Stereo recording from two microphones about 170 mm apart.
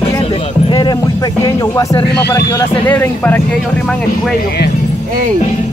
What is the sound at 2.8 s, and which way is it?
Speech, 10° left (ahead or behind).